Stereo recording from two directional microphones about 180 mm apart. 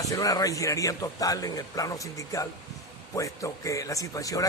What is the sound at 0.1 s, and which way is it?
Speech, 20° left (ahead or behind).